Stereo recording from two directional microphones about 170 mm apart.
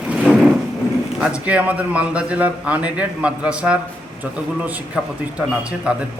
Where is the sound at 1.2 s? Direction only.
5° right (ahead or behind).